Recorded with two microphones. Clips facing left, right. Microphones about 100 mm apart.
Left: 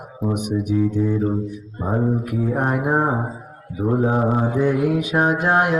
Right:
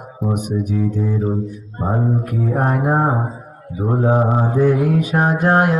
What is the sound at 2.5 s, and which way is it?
Music, 40° right (ahead or behind).